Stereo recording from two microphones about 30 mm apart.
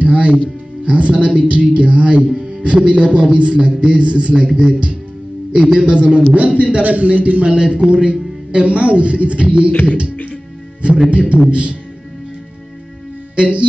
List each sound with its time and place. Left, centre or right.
0.0 s music: right
0.8 s speech: right
2.2 s music: right
2.6 s a man's voice: right
4.5 s a man's voice: right
7.5 s a man's voice: right
9.7 s speech: left
11.1 s a man's voice: right
13.4 s speech: right